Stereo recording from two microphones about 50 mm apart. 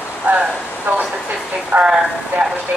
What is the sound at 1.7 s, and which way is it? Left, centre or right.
Speech, right.